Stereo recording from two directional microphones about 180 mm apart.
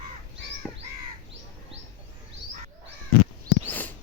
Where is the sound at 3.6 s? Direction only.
10° left (ahead or behind).